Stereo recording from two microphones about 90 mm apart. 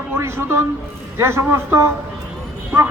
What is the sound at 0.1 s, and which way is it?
A man's voice, 30° right (ahead or behind).